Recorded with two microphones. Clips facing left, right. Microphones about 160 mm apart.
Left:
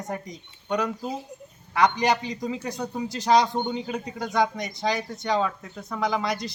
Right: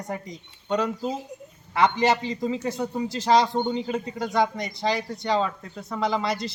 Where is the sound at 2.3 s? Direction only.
Centre (ahead or behind).